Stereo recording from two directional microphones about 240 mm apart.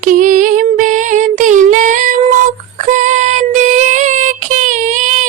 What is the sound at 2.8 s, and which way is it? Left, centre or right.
Child singing, right.